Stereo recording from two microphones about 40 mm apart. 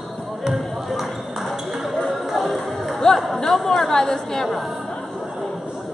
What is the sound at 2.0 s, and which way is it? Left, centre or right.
Music, centre.